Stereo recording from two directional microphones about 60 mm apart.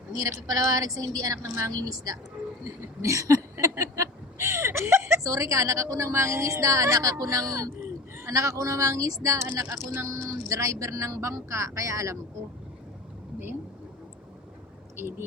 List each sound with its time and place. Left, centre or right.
0.2 s a woman's voice: right
1.4 s a woman's voice: right
1.7 s a woman's voice: right
3.0 s a sound: right
4.4 s a sound: right
5.2 s a woman's voice: right
10.1 s a woman's voice: right